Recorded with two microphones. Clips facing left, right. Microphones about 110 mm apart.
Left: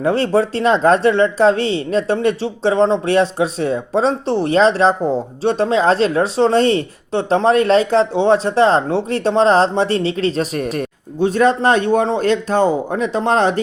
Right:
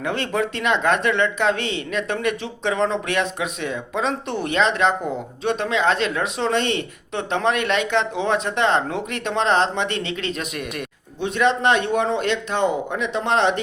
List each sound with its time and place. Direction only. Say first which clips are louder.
0.0 s speech: left 8 dB; 35° left (ahead or behind)